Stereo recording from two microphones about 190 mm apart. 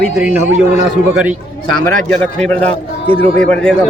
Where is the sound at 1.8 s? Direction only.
5° left (ahead or behind).